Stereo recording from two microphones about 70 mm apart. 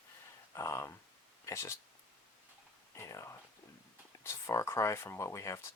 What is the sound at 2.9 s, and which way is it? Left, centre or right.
Speech, left.